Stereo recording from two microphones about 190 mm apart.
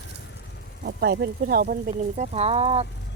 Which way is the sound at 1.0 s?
65° right (ahead or behind).